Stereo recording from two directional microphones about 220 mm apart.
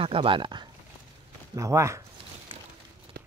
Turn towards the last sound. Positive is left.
turn(degrees=-45)  # may be behind; listen again after turning